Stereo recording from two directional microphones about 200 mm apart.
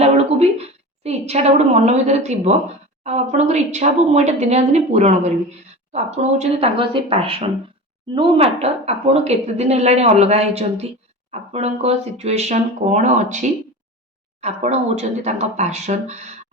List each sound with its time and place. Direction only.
0.0 s a woman's voice: 30° right (ahead or behind)